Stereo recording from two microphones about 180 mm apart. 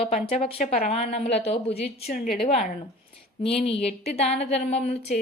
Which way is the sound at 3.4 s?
30° left (ahead or behind).